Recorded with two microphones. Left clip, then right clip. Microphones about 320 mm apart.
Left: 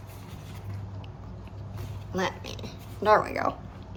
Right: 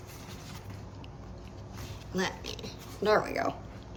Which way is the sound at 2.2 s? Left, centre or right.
Centre.